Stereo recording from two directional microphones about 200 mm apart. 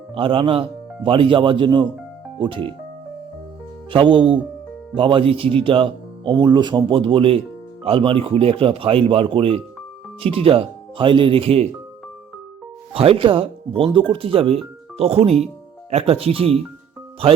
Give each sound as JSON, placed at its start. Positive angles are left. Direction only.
{"t": 0.1, "sound": "speech", "side_deg": -25}
{"t": 3.9, "sound": "speech", "side_deg": -25}
{"t": 12.9, "sound": "speech", "side_deg": -30}